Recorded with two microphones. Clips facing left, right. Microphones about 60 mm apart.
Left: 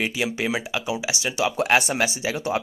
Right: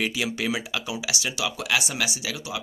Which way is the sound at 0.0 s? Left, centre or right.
Left.